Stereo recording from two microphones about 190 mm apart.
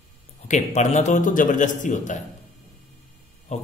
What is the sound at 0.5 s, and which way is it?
Speech, 40° left (ahead or behind).